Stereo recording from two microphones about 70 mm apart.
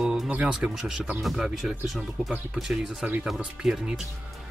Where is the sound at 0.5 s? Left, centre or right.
Centre.